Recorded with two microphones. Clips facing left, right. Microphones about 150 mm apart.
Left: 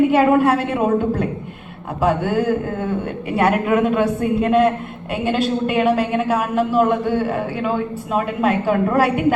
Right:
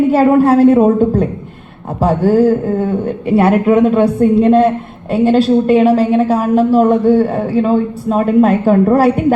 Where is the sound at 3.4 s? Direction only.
35° right (ahead or behind).